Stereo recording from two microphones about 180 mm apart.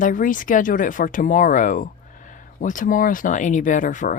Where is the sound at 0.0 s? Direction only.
50° left (ahead or behind).